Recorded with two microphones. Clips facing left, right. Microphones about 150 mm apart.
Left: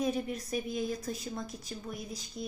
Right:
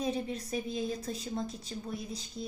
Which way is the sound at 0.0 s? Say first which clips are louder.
Left 1 dB; 30° right (ahead or behind).